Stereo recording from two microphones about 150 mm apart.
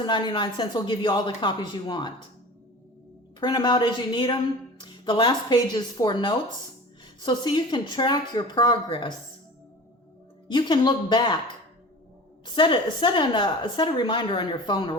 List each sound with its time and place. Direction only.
0.0 s a woman's voice: 30° left (ahead or behind)
3.4 s a woman's voice: 30° left (ahead or behind)
10.5 s a woman's voice: 30° left (ahead or behind)
12.5 s a woman's voice: 35° left (ahead or behind)